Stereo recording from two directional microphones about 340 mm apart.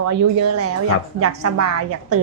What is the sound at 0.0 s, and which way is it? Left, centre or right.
A woman's voice, right.